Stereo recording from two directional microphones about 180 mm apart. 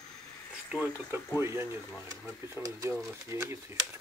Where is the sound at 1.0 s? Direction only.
15° right (ahead or behind).